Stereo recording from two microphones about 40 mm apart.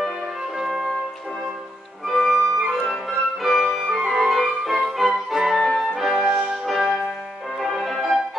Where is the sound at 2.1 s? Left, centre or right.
Centre.